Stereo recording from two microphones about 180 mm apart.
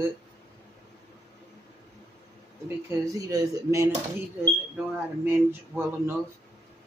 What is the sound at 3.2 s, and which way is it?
Speech, 20° right (ahead or behind).